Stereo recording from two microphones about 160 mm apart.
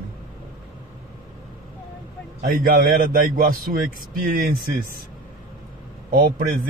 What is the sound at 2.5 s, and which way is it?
A man's voice, 65° right (ahead or behind).